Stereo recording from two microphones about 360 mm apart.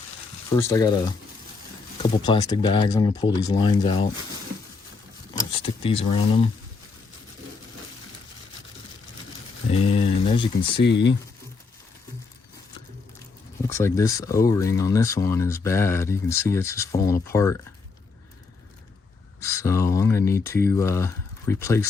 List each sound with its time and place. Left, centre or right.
0.5 s speech: centre
2.0 s speech: centre
5.5 s speech: centre
9.7 s a sound: centre
10.8 s speech: left
13.7 s speech: centre
19.4 s a sound: centre